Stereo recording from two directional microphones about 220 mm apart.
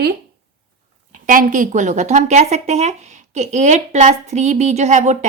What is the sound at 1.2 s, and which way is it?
Speech, 35° right (ahead or behind).